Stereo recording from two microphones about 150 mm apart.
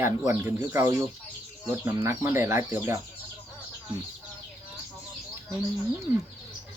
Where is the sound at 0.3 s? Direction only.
15° right (ahead or behind).